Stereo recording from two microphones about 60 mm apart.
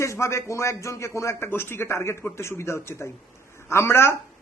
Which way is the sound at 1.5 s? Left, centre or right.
Left.